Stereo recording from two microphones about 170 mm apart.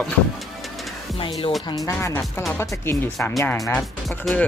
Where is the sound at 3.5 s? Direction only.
Centre (ahead or behind).